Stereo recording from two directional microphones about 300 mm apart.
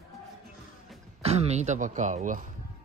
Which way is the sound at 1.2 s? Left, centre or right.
Right.